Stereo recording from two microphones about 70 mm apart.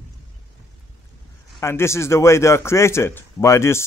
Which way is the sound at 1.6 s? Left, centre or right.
Left.